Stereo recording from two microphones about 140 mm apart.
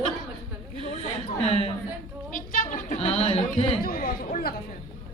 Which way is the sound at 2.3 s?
70° left (ahead or behind).